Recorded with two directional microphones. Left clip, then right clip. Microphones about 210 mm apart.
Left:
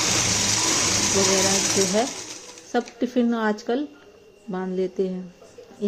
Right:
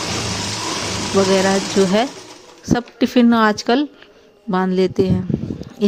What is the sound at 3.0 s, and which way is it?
A woman's voice, 55° right (ahead or behind).